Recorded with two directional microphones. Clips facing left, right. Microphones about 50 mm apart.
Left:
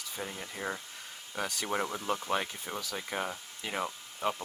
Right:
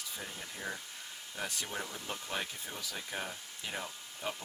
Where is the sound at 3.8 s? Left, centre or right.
Left.